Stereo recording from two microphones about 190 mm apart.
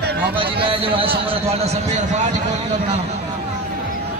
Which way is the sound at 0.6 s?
30° right (ahead or behind).